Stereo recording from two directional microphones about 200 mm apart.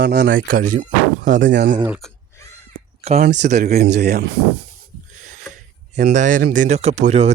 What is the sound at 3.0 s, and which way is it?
Speech, 30° right (ahead or behind).